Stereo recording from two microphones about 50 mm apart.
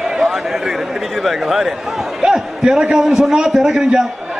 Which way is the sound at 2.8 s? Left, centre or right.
Centre.